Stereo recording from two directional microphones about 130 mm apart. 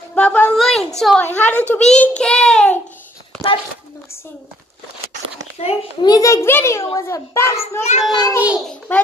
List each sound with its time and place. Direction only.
0.1 s a woman's voice: 10° left (ahead or behind)
1.2 s a child's voice: 15° left (ahead or behind)
5.6 s a child's voice: 50° left (ahead or behind)
6.0 s a child's voice: 25° left (ahead or behind)
8.1 s a child's voice: 30° left (ahead or behind)
8.4 s a child's voice: 10° right (ahead or behind)
8.6 s a child's voice: 10° left (ahead or behind)